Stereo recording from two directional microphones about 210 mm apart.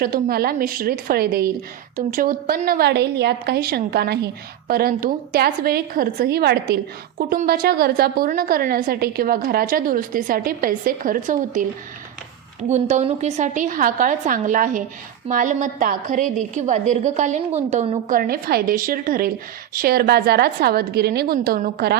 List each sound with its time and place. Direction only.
0.0 s a woman's voice: 45° right (ahead or behind)
12.6 s a woman's voice: 35° right (ahead or behind)
18.1 s a woman's voice: 45° right (ahead or behind)